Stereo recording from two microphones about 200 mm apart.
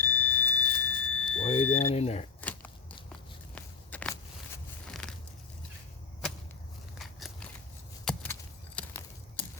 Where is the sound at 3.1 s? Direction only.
5° left (ahead or behind).